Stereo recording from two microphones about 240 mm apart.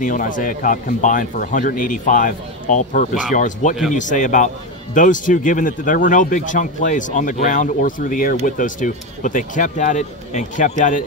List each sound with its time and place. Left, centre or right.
0.0 s speech: left